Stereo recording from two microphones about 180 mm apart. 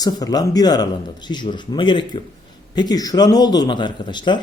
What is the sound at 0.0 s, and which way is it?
Speech, 20° left (ahead or behind).